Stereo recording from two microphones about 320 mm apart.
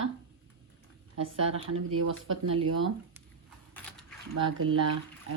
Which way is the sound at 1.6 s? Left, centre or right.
Right.